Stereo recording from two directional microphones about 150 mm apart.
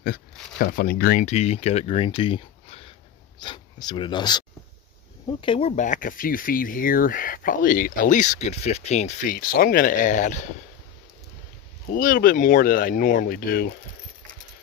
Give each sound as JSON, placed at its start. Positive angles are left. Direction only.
{"t": 0.0, "sound": "speech", "side_deg": 80}
{"t": 1.2, "sound": "speech", "side_deg": 50}
{"t": 5.8, "sound": "speech", "side_deg": 60}
{"t": 11.9, "sound": "speech", "side_deg": 65}